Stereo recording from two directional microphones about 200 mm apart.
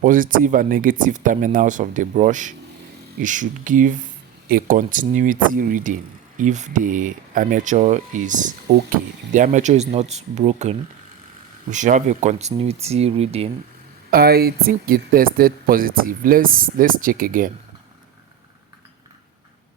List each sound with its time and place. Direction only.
0.0 s speech: 40° right (ahead or behind)
14.1 s speech: 50° right (ahead or behind)